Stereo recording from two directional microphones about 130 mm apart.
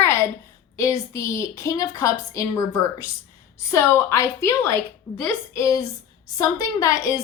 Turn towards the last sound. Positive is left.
turn(degrees=25)  # may be behind; listen again after turning